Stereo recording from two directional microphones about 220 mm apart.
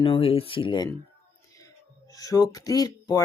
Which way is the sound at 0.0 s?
25° left (ahead or behind).